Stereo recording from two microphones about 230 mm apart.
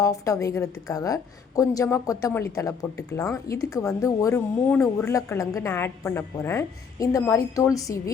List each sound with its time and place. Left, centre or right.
0.0 s speech: centre